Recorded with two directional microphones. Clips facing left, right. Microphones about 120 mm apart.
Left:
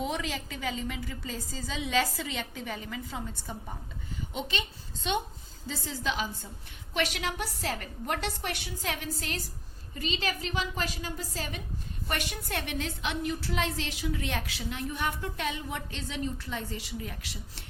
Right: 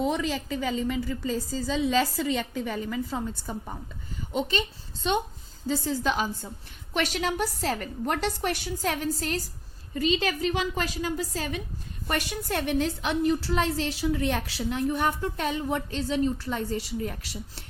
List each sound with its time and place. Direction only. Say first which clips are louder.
0.0 s a woman's voice: right 6 dB; 35° right (ahead or behind)
12.0 s a woman's voice: right 5 dB; 40° right (ahead or behind)